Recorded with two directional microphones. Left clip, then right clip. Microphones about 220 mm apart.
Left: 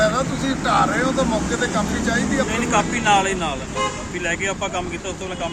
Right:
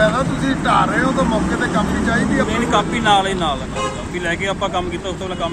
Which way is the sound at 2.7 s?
Centre (ahead or behind).